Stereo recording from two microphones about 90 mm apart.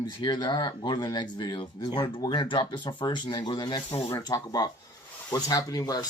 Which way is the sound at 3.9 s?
90° left.